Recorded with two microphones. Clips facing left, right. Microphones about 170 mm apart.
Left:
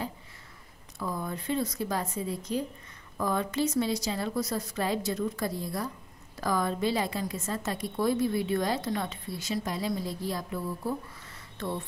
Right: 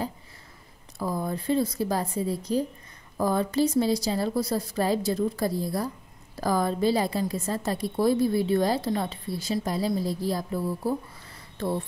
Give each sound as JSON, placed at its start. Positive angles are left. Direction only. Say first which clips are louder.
{"t": 0.9, "sound": "a woman's voice", "louder": "right 5 dB", "side_deg": -35}